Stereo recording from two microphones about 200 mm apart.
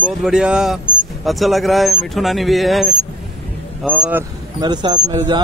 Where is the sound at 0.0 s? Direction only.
5° right (ahead or behind).